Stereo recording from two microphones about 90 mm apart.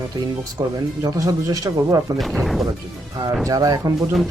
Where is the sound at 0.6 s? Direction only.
45° right (ahead or behind).